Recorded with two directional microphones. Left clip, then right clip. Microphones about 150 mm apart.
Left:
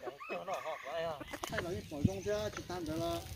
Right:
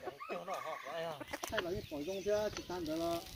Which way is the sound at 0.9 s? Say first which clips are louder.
Left 4 dB; 50° left (ahead or behind).